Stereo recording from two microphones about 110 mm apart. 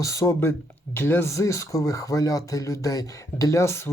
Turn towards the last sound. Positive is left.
turn(degrees=25)  # may be behind; listen again after turning